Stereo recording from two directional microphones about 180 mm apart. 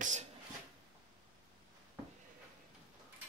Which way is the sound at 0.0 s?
40° right (ahead or behind).